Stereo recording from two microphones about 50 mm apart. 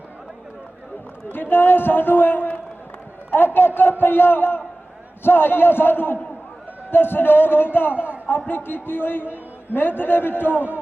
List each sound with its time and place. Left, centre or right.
1.3 s a man's voice: left